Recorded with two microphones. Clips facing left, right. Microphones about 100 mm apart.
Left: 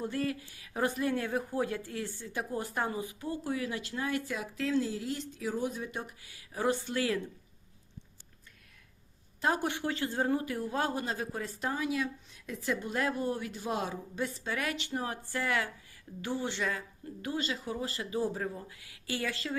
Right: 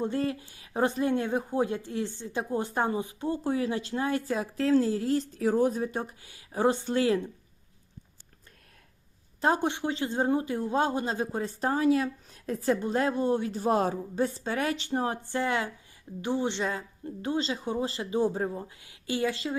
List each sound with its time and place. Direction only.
0.0 s speech: 30° right (ahead or behind)
9.4 s speech: 25° right (ahead or behind)